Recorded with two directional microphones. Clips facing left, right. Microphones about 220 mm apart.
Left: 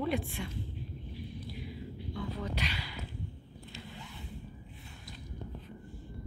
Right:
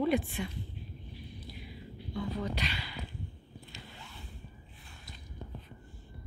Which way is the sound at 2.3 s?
5° left (ahead or behind).